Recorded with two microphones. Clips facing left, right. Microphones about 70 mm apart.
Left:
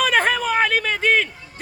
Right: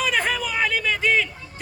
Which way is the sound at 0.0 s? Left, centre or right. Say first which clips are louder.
Left 5 dB; left.